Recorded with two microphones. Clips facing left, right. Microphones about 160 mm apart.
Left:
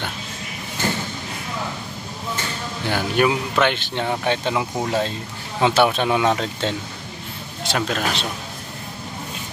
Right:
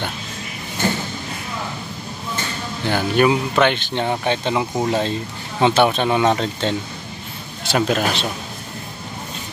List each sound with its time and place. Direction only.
2.9 s speech: centre (ahead or behind)